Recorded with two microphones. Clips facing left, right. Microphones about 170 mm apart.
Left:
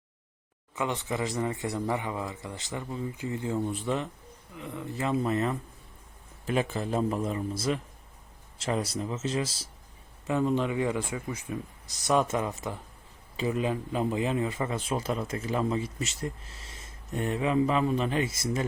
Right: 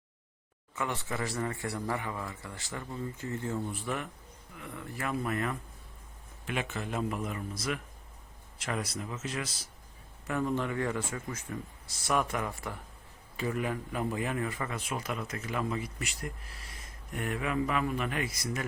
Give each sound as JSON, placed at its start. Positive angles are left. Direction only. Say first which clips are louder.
{"t": 0.8, "sound": "a man's voice", "louder": "left 4 dB", "side_deg": 20}